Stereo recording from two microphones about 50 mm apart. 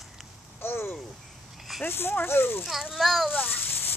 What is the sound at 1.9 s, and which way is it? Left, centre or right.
Speech, left.